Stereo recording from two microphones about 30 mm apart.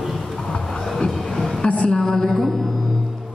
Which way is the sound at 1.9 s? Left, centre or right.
Centre.